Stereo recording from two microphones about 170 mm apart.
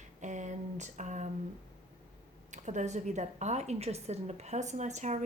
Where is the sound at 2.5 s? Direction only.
45° right (ahead or behind).